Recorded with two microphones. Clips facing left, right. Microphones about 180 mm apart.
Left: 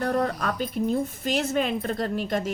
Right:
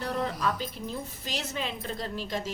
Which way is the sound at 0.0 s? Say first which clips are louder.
Left 5 dB; 50° left (ahead or behind).